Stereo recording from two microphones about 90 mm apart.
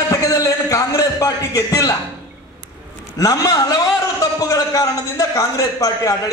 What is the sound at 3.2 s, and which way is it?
A man's voice, 45° left (ahead or behind).